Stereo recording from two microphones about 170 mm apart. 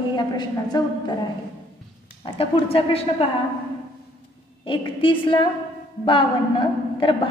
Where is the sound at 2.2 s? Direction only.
30° left (ahead or behind).